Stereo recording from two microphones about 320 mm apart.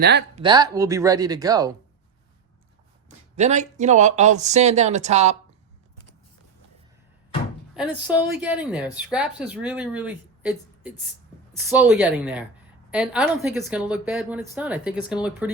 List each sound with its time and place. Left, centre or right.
0.0 s speech: right
0.3 s speech: centre
3.3 s speech: right
7.7 s speech: centre